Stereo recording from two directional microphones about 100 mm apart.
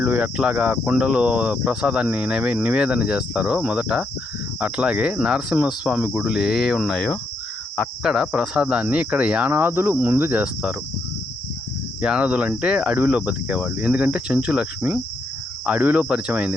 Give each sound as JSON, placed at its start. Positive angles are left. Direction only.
{"t": 0.0, "sound": "speech", "side_deg": -10}
{"t": 8.0, "sound": "speech", "side_deg": -5}
{"t": 9.5, "sound": "cricket", "side_deg": -20}
{"t": 12.0, "sound": "speech", "side_deg": -10}